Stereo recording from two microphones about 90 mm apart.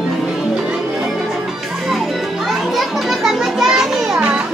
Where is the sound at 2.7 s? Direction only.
5° right (ahead or behind).